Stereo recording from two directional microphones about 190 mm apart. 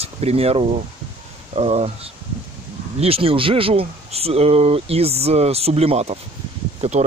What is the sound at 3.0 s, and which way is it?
Speech, 30° right (ahead or behind).